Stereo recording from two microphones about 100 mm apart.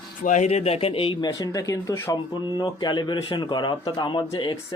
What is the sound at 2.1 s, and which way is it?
Speech, 50° left (ahead or behind).